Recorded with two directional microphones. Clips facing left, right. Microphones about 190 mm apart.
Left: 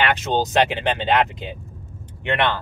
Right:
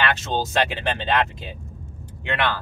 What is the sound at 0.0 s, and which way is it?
Speech, 15° left (ahead or behind).